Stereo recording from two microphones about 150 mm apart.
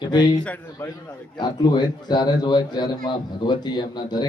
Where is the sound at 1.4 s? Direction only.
30° left (ahead or behind).